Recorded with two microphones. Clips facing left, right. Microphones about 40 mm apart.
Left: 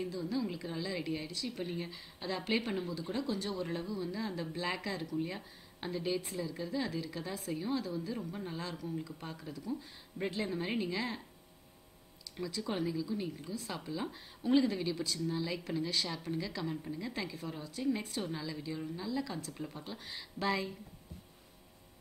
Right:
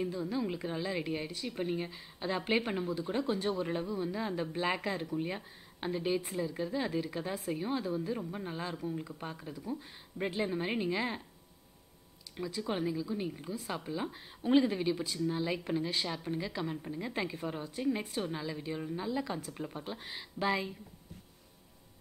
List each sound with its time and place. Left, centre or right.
0.0 s a woman's voice: right
12.4 s a woman's voice: centre